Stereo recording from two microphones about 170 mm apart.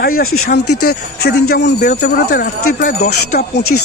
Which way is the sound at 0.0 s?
60° left (ahead or behind).